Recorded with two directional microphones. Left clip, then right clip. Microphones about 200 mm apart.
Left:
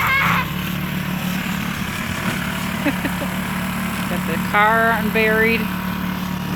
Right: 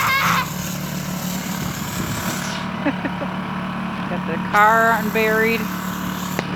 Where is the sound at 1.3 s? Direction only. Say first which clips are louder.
Left 3 dB; 15° right (ahead or behind); by 4.4 s 15° left (ahead or behind).